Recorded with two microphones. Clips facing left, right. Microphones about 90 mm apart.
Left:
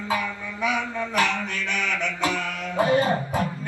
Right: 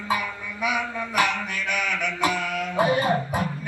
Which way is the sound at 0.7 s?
15° right (ahead or behind).